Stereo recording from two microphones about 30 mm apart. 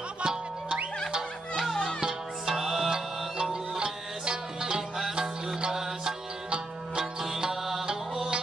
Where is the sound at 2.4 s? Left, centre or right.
Centre.